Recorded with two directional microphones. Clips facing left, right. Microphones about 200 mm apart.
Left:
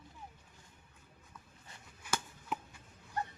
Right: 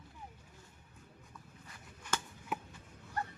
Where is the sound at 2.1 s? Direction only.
10° left (ahead or behind).